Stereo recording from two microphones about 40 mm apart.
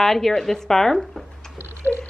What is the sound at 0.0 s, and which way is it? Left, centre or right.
A woman's voice, centre.